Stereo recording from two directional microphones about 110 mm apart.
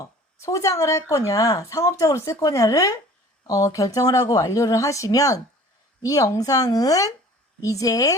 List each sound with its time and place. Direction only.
0.0 s speech: 30° left (ahead or behind)